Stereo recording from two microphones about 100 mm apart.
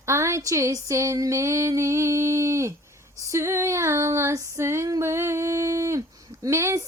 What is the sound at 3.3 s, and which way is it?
Female singing, 30° right (ahead or behind).